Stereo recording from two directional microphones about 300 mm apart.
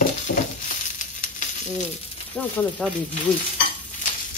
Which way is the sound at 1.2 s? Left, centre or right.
Left.